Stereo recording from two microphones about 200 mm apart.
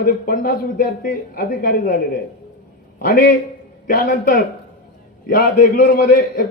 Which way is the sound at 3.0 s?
45° left (ahead or behind).